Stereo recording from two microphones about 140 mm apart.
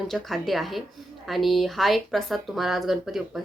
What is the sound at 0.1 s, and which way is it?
A woman's voice, centre (ahead or behind).